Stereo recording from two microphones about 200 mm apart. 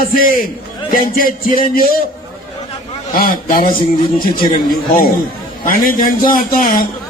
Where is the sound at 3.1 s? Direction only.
45° left (ahead or behind).